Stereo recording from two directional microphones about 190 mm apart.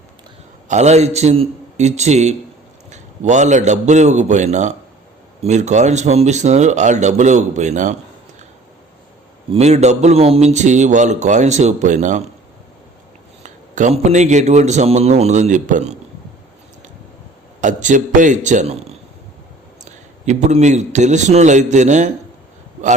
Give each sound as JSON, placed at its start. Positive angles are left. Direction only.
{"t": 0.7, "sound": "a man's voice", "side_deg": -35}
{"t": 9.5, "sound": "a man's voice", "side_deg": -35}
{"t": 13.4, "sound": "a man's voice", "side_deg": -40}
{"t": 17.6, "sound": "a man's voice", "side_deg": -40}